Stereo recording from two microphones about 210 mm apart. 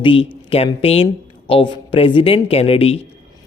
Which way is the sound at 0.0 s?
25° left (ahead or behind).